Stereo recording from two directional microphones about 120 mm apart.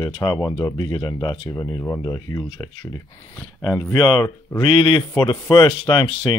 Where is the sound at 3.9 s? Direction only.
30° left (ahead or behind).